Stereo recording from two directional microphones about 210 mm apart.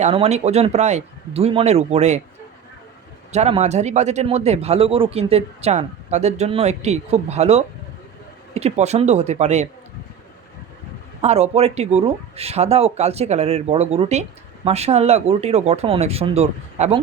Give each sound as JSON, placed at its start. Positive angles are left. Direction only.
{"t": 0.0, "sound": "a man's voice", "side_deg": -30}
{"t": 3.3, "sound": "a man's voice", "side_deg": -30}
{"t": 11.2, "sound": "speech", "side_deg": -30}